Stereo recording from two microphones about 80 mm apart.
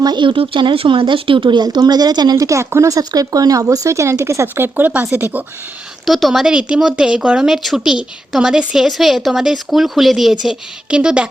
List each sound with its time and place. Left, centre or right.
0.0 s speech: right
6.1 s a woman's voice: centre